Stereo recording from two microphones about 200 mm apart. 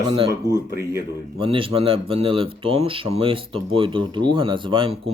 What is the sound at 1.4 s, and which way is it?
Speech, 25° right (ahead or behind).